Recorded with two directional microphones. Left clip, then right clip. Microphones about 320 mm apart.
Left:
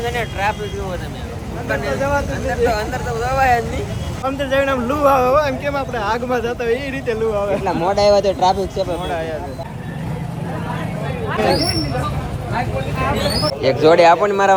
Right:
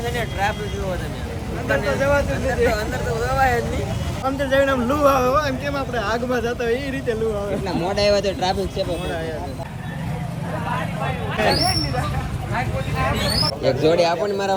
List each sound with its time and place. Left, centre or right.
0.0 s speech: centre
13.1 s speech: centre
14.2 s speech: left